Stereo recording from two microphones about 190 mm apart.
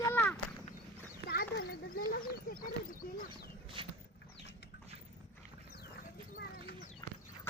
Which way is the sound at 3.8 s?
30° right (ahead or behind).